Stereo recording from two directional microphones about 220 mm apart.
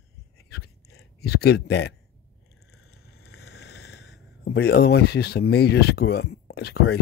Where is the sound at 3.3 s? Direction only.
45° left (ahead or behind).